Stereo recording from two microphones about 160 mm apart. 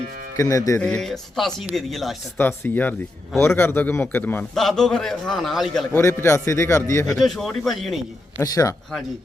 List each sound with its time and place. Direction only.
0.3 s speech: 20° left (ahead or behind)
0.8 s speech: 5° left (ahead or behind)
2.4 s a man's voice: 10° left (ahead or behind)
5.9 s a man's voice: 15° left (ahead or behind)
7.2 s speech: centre (ahead or behind)
8.4 s speech: 20° left (ahead or behind)